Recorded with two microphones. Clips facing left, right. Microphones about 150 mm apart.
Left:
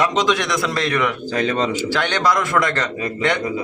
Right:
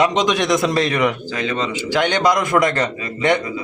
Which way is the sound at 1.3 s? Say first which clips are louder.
Left 3 dB; 40° left (ahead or behind).